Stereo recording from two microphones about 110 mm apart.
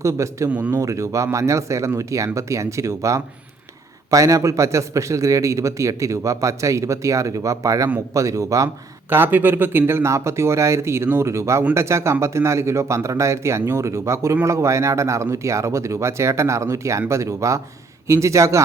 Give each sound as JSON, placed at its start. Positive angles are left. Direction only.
{"t": 0.0, "sound": "a man's voice", "side_deg": -25}
{"t": 0.5, "sound": "speech", "side_deg": -10}
{"t": 0.8, "sound": "a man's voice", "side_deg": -30}